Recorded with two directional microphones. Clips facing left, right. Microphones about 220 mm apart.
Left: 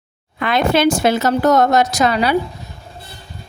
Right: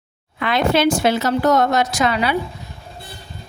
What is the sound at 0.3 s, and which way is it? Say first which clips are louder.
A woman's voice: left 2 dB; 50° left (ahead or behind).